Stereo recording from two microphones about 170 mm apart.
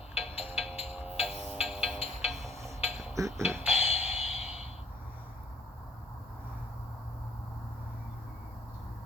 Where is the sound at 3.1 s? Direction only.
15° right (ahead or behind).